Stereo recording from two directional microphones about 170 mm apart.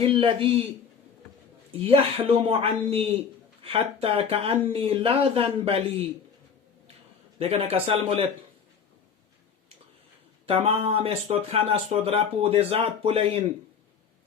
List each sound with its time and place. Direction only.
0.0 s speech: 35° right (ahead or behind)
1.8 s speech: 35° right (ahead or behind)
7.3 s speech: 35° right (ahead or behind)
10.4 s speech: 35° right (ahead or behind)